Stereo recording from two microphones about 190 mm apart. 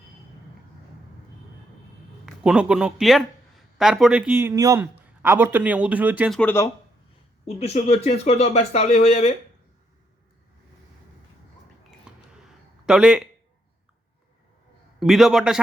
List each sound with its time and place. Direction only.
2.2 s speech: 5° right (ahead or behind)
6.3 s speech: 10° left (ahead or behind)
7.4 s speech: 35° left (ahead or behind)
11.8 s a sound: 5° right (ahead or behind)
14.9 s a man's voice: centre (ahead or behind)